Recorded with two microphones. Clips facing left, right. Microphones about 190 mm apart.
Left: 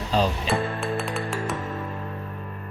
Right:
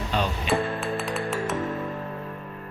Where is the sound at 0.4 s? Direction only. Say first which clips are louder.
Even; centre (ahead or behind).